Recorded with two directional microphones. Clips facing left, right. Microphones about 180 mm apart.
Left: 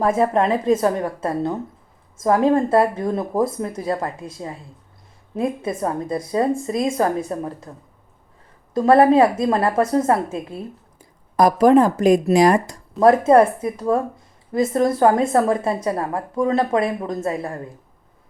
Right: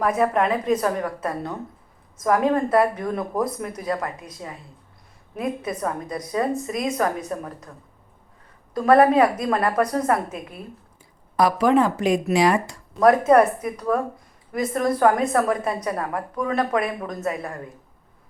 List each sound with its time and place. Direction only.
0.0 s a woman's voice: 30° left (ahead or behind)
8.7 s a woman's voice: 25° left (ahead or behind)
11.3 s speech: 40° left (ahead or behind)
13.0 s a woman's voice: 30° left (ahead or behind)